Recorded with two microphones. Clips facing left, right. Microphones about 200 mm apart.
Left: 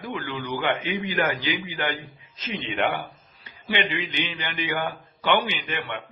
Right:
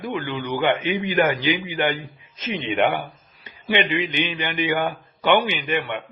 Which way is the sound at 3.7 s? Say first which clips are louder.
Right 5 dB; 15° right (ahead or behind).